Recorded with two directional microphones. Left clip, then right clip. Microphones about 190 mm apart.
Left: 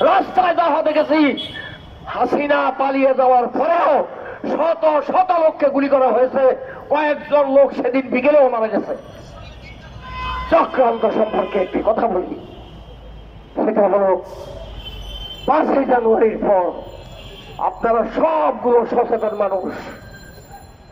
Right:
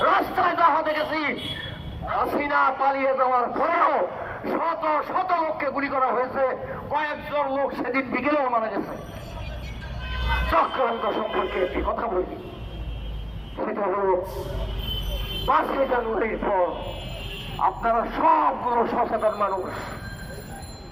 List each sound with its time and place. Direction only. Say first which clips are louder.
0.0 s a sound: left 6 dB; 50° left (ahead or behind)
2.0 s a man's voice: left 7 dB; 50° left (ahead or behind)
10.5 s a man's voice: left 8 dB; 50° left (ahead or behind)
13.6 s a man's voice: left 10 dB; 50° left (ahead or behind)
15.4 s a man's voice: left 6 dB; 50° left (ahead or behind)